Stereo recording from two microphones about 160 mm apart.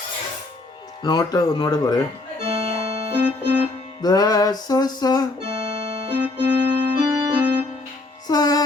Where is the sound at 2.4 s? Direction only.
40° right (ahead or behind).